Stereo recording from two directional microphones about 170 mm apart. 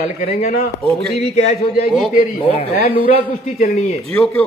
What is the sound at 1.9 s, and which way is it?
Speech, centre (ahead or behind).